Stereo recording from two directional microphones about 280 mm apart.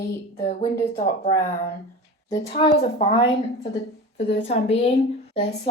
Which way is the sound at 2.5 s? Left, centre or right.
Centre.